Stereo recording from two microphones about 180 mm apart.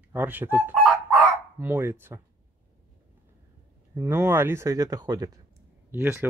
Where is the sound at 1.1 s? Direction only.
10° right (ahead or behind).